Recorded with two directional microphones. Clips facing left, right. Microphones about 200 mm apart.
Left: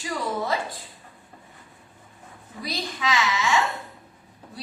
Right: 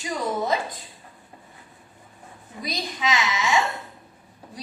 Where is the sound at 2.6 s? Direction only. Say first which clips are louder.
Right 1 dB; 20° right (ahead or behind).